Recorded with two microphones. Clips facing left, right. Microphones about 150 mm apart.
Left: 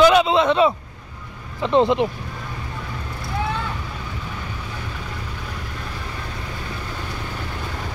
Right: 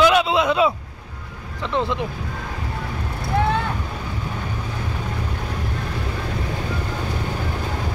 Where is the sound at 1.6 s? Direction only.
20° left (ahead or behind).